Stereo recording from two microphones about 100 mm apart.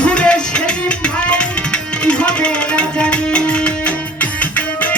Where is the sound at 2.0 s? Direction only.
10° left (ahead or behind).